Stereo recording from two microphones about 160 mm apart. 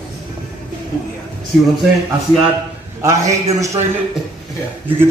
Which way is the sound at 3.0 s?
20° right (ahead or behind).